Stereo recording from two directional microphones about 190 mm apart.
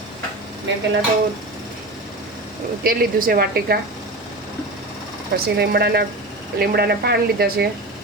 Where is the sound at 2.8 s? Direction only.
50° right (ahead or behind).